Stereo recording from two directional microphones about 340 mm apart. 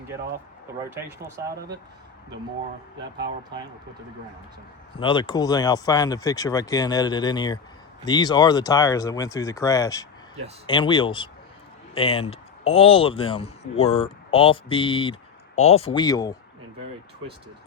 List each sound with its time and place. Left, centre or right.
1.5 s speech: right
4.9 s speech: centre